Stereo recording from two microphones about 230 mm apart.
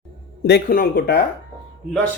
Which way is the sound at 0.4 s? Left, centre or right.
Left.